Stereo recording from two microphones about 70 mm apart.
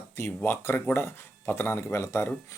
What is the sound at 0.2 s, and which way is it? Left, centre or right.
Speech, left.